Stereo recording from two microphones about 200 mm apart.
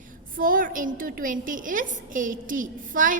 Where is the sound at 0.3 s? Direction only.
45° right (ahead or behind).